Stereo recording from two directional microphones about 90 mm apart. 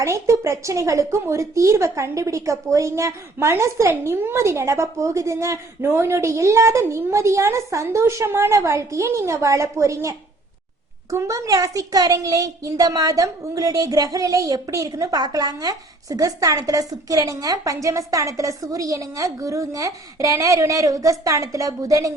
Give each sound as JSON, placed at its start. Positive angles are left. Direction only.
{"t": 0.0, "sound": "a child's voice", "side_deg": -35}